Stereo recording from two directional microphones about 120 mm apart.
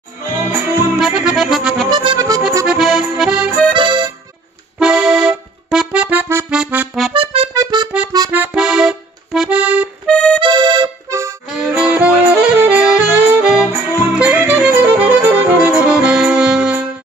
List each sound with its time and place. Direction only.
0.9 s accordion: 5° right (ahead or behind)
1.9 s accordion: 40° right (ahead or behind)
2.6 s accordion: 5° right (ahead or behind)
3.7 s accordion: 40° right (ahead or behind)
4.7 s accordion: 5° right (ahead or behind)
7.5 s accordion: 35° right (ahead or behind)
8.3 s accordion: 10° right (ahead or behind)
10.0 s accordion: 10° left (ahead or behind)
10.4 s accordion: 40° right (ahead or behind)
11.1 s music: 25° right (ahead or behind)
11.4 s music: 5° right (ahead or behind)